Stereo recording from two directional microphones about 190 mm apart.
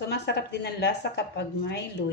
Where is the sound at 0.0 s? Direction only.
60° left (ahead or behind).